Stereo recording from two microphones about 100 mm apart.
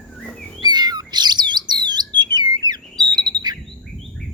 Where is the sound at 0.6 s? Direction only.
45° right (ahead or behind).